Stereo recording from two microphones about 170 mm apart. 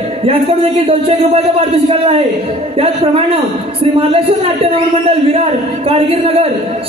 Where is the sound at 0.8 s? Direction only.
35° right (ahead or behind).